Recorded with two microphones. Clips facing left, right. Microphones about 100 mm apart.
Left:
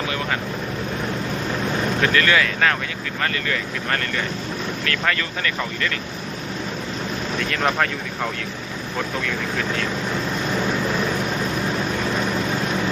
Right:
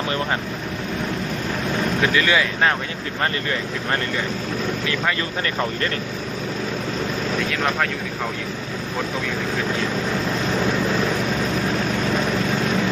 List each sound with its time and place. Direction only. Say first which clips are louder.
2.0 s speech: left 1 dB; 15° right (ahead or behind)
7.3 s speech: left 2 dB; centre (ahead or behind)